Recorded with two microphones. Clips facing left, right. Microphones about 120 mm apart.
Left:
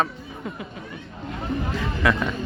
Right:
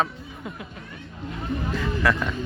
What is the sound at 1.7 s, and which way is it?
Music, centre (ahead or behind).